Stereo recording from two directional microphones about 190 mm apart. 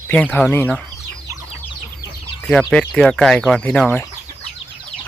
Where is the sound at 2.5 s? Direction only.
5° left (ahead or behind).